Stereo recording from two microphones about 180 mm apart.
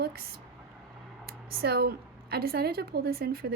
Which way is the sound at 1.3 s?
55° right (ahead or behind).